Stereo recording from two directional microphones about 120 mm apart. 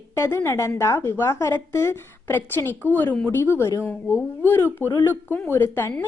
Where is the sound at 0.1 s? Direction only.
25° left (ahead or behind).